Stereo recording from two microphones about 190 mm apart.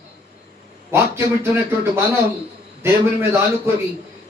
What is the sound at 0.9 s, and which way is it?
Speech, 15° right (ahead or behind).